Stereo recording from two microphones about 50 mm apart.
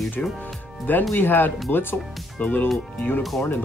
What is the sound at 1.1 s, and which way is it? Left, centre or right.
Speech, left.